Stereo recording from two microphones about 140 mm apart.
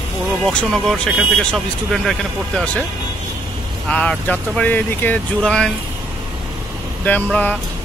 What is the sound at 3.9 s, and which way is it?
Speech, 10° left (ahead or behind).